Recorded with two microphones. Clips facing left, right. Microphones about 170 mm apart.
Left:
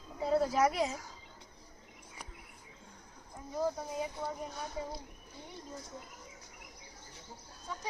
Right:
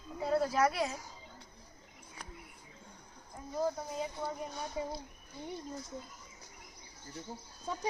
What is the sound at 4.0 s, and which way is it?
A man's voice, centre (ahead or behind).